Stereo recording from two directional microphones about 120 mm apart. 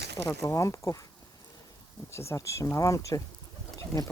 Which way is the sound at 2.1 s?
25° left (ahead or behind).